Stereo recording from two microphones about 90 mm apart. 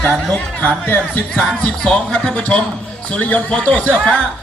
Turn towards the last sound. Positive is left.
turn(degrees=15)  # may be behind; listen again after turning